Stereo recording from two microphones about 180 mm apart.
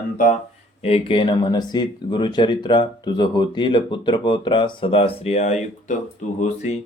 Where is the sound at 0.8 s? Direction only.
30° left (ahead or behind).